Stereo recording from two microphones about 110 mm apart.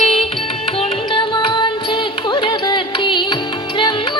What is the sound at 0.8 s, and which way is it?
Music, 50° left (ahead or behind).